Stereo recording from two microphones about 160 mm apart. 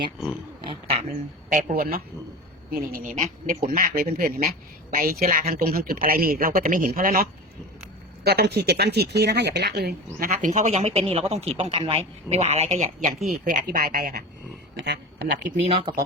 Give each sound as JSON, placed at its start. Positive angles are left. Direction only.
{"t": 0.6, "sound": "speech", "side_deg": -35}
{"t": 1.1, "sound": "speech", "side_deg": -55}
{"t": 8.2, "sound": "speech", "side_deg": -90}
{"t": 13.4, "sound": "speech", "side_deg": -60}
{"t": 14.8, "sound": "speech", "side_deg": -90}
{"t": 15.6, "sound": "speech", "side_deg": -35}